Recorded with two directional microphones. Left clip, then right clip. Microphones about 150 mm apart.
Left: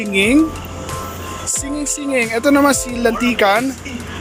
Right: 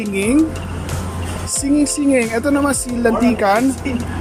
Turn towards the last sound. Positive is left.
turn(degrees=-5)  # may be behind; listen again after turning